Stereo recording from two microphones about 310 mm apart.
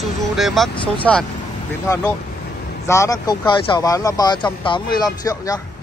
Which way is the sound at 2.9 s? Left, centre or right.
Centre.